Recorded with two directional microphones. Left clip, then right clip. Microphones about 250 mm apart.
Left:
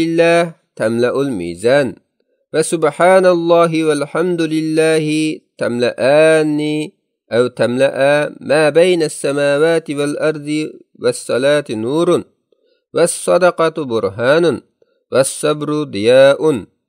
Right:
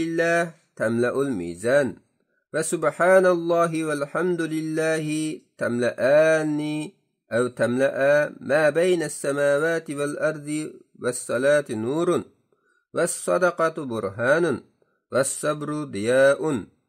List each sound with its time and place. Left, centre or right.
0.0 s a man's voice: left